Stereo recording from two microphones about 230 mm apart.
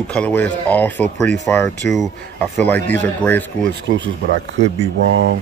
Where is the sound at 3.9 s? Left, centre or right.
Right.